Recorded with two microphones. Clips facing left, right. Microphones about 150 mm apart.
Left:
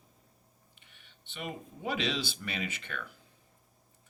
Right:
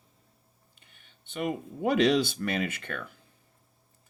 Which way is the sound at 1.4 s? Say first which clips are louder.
Right 9 dB; 50° right (ahead or behind).